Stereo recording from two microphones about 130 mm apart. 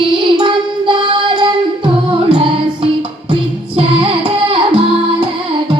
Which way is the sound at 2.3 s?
40° right (ahead or behind).